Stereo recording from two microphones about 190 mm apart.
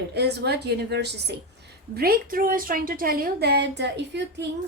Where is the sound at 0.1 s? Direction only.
60° right (ahead or behind).